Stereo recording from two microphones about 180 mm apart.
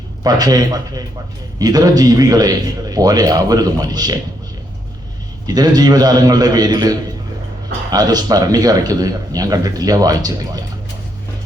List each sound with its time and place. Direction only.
0.2 s a man's voice: 20° right (ahead or behind)
5.5 s a man's voice: 20° right (ahead or behind)